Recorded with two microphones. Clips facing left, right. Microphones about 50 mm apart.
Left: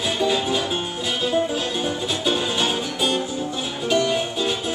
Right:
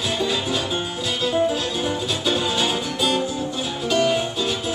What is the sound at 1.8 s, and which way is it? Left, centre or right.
Music, centre.